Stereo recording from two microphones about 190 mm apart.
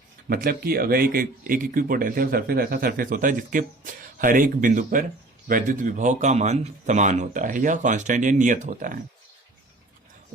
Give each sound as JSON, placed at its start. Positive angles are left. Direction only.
{"t": 0.3, "sound": "a man's voice", "side_deg": -50}